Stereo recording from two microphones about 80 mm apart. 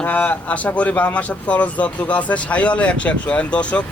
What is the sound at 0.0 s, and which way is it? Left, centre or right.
Speech, centre.